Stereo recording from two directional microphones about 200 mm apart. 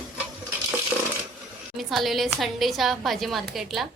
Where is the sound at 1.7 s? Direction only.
Centre (ahead or behind).